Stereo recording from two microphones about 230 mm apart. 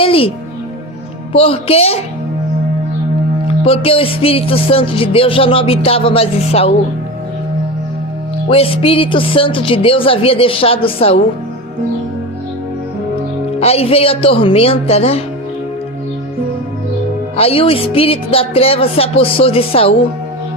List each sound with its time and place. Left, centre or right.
0.0 s a woman's voice: left
3.4 s speech: left
8.4 s speech: left
13.6 s speech: left
17.3 s speech: left